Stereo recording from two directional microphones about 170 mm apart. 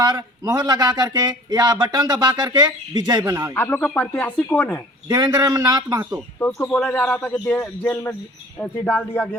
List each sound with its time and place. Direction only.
0.0 s speech: 20° right (ahead or behind)
3.5 s speech: 10° left (ahead or behind)
5.0 s speech: 25° right (ahead or behind)
6.4 s speech: 5° left (ahead or behind)